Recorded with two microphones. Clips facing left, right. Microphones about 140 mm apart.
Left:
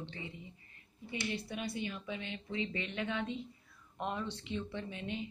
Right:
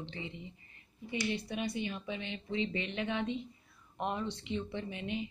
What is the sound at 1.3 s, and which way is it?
A woman's voice, 20° right (ahead or behind).